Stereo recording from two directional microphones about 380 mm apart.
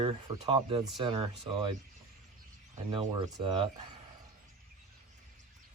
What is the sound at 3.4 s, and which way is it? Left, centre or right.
Speech, centre.